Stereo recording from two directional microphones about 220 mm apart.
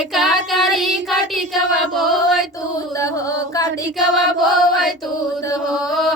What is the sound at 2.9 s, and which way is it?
Music, 15° left (ahead or behind).